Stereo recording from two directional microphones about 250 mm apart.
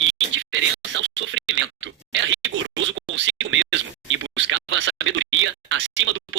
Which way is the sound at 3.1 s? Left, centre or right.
Right.